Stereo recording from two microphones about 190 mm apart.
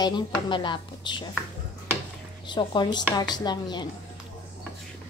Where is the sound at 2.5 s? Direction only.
25° left (ahead or behind).